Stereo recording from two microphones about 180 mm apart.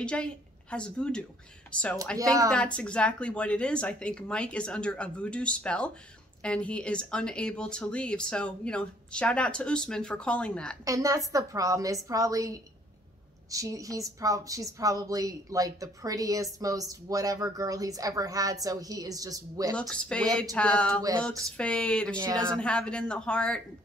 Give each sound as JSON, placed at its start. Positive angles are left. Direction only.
{"t": 0.0, "sound": "a woman's voice", "side_deg": 5}
{"t": 10.9, "sound": "speech", "side_deg": -20}
{"t": 19.7, "sound": "speech", "side_deg": 5}
{"t": 22.2, "sound": "speech", "side_deg": -25}
{"t": 22.6, "sound": "speech", "side_deg": 5}